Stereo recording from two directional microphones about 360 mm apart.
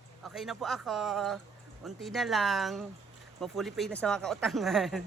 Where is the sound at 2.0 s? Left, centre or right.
Centre.